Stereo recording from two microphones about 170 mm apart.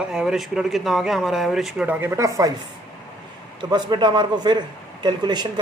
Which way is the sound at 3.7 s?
25° right (ahead or behind).